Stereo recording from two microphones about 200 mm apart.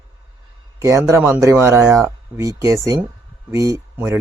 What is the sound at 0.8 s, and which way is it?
Speech, 15° right (ahead or behind).